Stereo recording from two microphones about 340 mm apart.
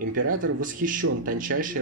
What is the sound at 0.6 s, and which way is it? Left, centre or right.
Speech, right.